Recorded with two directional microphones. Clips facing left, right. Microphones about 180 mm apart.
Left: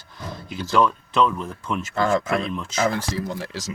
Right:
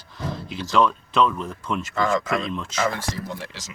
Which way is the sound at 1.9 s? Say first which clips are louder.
Left 2 dB; 35° left (ahead or behind).